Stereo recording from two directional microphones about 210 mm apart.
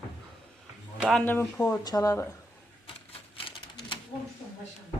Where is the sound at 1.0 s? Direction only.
5° left (ahead or behind).